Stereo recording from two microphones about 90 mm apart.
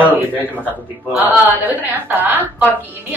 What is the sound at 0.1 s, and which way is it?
A woman's voice, 20° right (ahead or behind).